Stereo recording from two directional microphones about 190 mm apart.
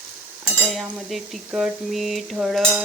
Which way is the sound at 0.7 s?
Centre (ahead or behind).